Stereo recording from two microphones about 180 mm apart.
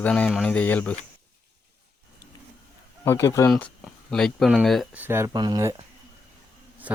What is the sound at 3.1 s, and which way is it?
Speech, 15° left (ahead or behind).